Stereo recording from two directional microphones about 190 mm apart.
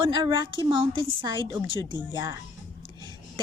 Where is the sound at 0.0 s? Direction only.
25° right (ahead or behind).